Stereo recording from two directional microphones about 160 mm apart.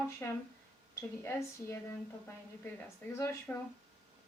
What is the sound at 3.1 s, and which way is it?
Speech, 15° left (ahead or behind).